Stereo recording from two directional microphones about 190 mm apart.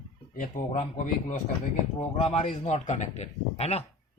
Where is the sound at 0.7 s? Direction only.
35° left (ahead or behind).